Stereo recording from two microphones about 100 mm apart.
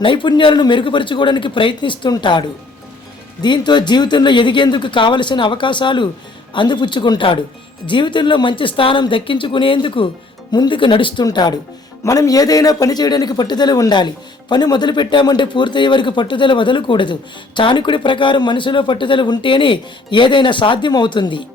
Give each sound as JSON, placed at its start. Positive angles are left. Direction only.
{"t": 0.0, "sound": "speech", "side_deg": 55}
{"t": 3.4, "sound": "speech", "side_deg": 50}
{"t": 11.3, "sound": "a man's voice", "side_deg": 45}